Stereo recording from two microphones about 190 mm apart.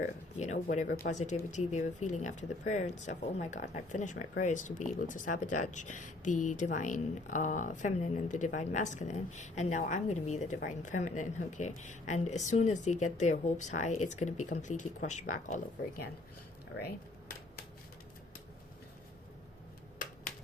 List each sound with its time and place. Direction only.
0.0 s speech: 40° left (ahead or behind)
16.8 s typewriter: 50° left (ahead or behind)